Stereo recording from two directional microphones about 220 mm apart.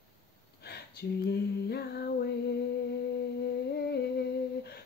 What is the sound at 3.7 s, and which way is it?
Female singing, 50° left (ahead or behind).